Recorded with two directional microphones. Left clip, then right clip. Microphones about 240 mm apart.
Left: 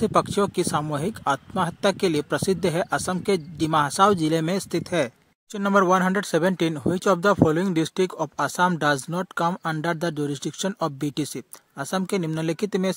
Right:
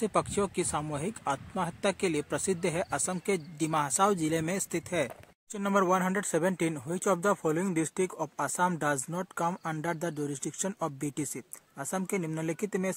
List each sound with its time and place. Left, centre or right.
0.0 s speech: left